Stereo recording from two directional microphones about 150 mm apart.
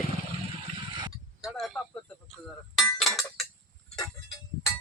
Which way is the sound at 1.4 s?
Centre (ahead or behind).